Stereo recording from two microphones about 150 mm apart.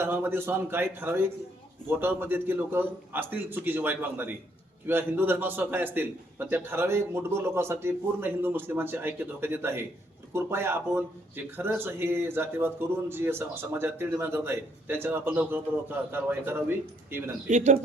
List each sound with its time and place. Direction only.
0.0 s speech: 15° right (ahead or behind)
17.5 s a man's voice: 50° right (ahead or behind)